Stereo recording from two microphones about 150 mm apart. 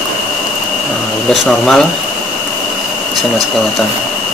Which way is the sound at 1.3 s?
Centre (ahead or behind).